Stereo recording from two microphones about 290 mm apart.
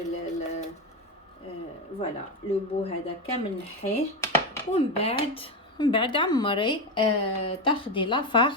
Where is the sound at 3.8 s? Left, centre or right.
Left.